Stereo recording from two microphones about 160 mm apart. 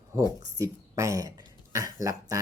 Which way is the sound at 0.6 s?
20° right (ahead or behind).